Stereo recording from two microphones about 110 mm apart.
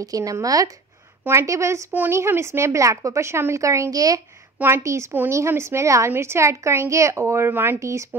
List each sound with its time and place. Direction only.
0.0 s a woman's voice: 30° right (ahead or behind)
4.6 s a woman's voice: 20° right (ahead or behind)